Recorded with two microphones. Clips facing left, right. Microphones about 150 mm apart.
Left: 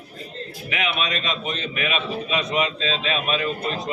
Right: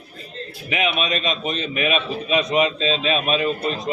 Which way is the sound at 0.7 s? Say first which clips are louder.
Right 4 dB; 20° right (ahead or behind).